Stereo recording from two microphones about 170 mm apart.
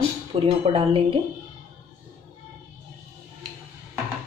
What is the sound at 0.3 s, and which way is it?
Speech, 35° right (ahead or behind).